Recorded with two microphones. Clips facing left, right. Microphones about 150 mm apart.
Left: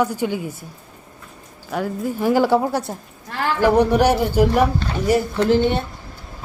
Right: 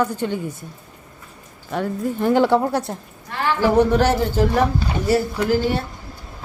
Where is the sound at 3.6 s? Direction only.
15° left (ahead or behind).